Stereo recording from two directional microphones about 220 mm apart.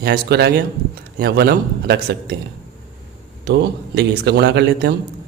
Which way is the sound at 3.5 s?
50° right (ahead or behind).